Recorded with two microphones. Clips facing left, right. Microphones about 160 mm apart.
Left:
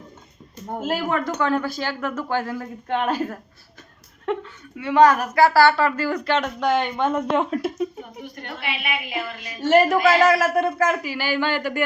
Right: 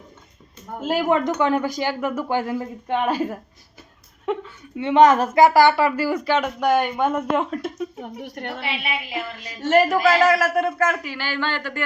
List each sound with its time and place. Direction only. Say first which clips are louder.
0.9 s a man's voice: right 4 dB; 20° right (ahead or behind)
4.8 s speech: right 1 dB; 25° right (ahead or behind); by 7.9 s 5° left (ahead or behind)
8.2 s a woman's voice: right 4 dB; 70° right (ahead or behind)
8.6 s a woman's voice: left 2 dB; 30° right (ahead or behind)
9.4 s a man's voice: left 1 dB; centre (ahead or behind)